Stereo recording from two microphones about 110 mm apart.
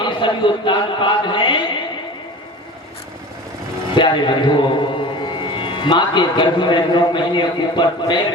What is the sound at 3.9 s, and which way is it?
A man's voice, 45° left (ahead or behind).